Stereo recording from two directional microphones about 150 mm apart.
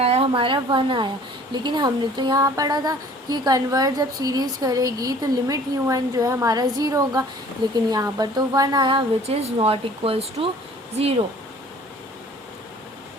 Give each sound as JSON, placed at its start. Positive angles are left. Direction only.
{"t": 0.0, "sound": "a woman's voice", "side_deg": -40}